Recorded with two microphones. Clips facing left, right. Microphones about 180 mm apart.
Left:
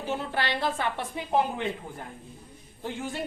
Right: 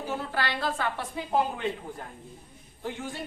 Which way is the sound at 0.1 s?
20° left (ahead or behind).